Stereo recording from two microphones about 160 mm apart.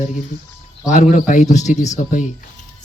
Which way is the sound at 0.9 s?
50° left (ahead or behind).